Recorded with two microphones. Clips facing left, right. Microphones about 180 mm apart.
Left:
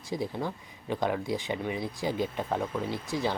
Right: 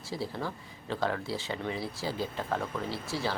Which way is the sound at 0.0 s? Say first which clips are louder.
Left 3 dB; 15° left (ahead or behind).